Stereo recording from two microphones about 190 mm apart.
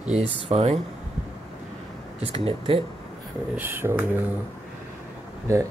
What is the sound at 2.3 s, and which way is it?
Speech, 30° right (ahead or behind).